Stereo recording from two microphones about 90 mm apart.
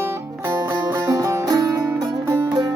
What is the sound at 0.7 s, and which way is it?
Music, 40° right (ahead or behind).